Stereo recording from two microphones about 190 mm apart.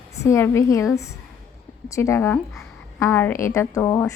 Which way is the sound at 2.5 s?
10° left (ahead or behind).